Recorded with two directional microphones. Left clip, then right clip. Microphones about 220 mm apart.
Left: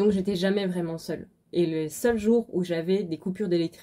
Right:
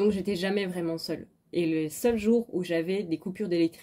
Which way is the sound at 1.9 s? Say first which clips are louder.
Left 2 dB; 50° left (ahead or behind).